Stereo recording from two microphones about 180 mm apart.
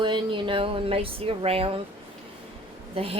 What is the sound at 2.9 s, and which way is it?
Speech, 30° right (ahead or behind).